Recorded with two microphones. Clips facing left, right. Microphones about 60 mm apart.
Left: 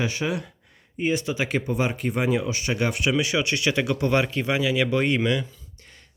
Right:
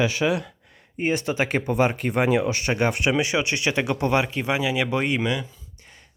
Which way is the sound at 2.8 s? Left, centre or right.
Right.